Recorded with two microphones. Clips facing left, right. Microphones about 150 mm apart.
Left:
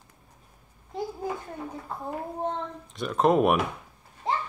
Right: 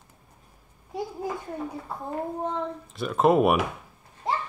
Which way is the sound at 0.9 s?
10° right (ahead or behind).